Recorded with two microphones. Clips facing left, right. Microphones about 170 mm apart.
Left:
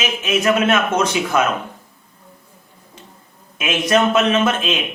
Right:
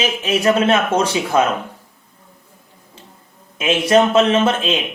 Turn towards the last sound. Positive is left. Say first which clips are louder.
# right 1 dB
turn(degrees=-30)  # may be behind; listen again after turning